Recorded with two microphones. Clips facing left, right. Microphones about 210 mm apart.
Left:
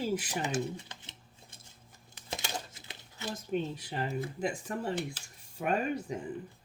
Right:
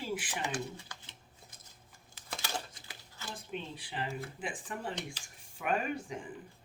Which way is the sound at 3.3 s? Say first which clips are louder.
Left 8 dB; 45° left (ahead or behind).